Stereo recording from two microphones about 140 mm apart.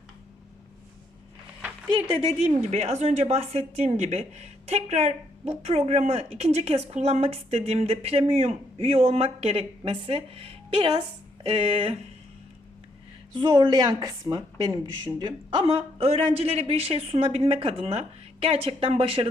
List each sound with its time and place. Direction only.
2.4 s a woman's voice: 50° right (ahead or behind)
13.3 s a woman's voice: 30° right (ahead or behind)